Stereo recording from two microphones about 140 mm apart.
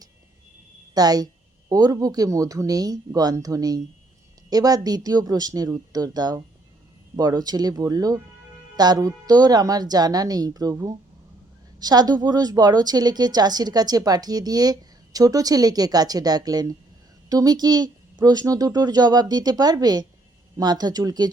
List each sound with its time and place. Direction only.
0.9 s a woman's voice: 30° right (ahead or behind)